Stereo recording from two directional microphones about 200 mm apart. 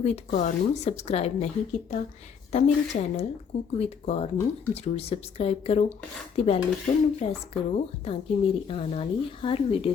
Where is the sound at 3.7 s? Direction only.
30° left (ahead or behind).